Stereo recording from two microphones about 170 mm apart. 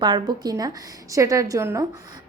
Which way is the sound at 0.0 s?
25° right (ahead or behind).